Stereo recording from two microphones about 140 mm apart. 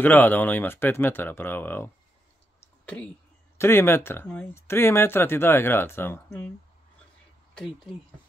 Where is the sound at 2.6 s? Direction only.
10° left (ahead or behind).